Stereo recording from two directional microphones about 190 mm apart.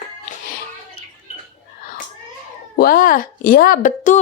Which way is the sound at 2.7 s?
50° left (ahead or behind).